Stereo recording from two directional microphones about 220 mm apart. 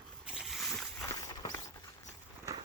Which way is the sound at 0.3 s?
Centre (ahead or behind).